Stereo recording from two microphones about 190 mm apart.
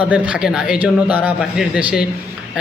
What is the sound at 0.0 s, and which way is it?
A man's voice, 5° right (ahead or behind).